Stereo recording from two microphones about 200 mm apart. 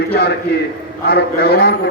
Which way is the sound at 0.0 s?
50° left (ahead or behind).